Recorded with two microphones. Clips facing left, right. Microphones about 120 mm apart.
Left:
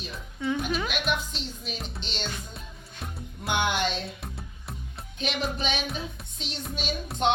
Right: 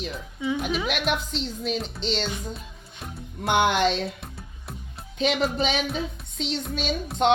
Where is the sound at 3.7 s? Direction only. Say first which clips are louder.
Right 6 dB; 90° right.